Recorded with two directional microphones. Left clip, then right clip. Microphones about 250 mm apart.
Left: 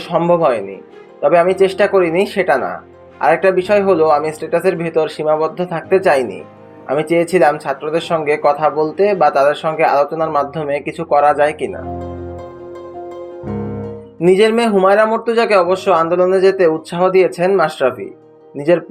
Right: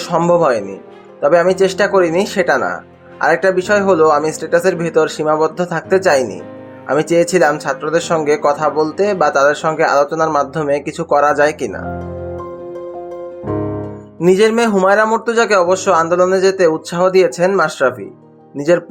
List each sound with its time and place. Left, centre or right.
0.0 s speech: right
4.8 s speech: right
5.1 s speech: right
14.2 s a man's voice: centre